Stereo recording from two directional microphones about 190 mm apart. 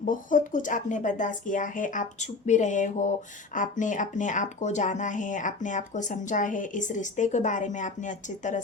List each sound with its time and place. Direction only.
0.0 s speech: 45° left (ahead or behind)